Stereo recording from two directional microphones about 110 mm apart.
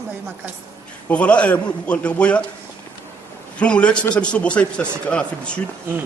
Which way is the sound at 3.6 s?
10° left (ahead or behind).